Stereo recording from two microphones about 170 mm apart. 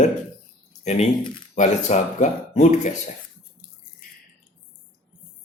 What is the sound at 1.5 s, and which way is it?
A man's voice, 45° left (ahead or behind).